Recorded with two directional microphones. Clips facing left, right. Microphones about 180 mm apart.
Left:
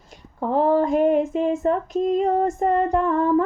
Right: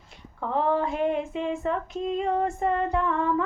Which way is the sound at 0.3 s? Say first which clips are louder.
Left 6 dB; 40° left (ahead or behind).